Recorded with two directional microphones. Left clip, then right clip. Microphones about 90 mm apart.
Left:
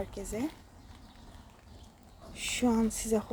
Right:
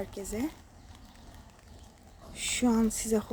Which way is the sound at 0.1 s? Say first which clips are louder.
Right 1 dB; 40° right (ahead or behind).